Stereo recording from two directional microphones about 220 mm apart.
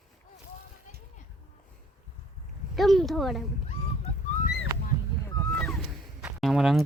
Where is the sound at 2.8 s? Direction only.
Centre (ahead or behind).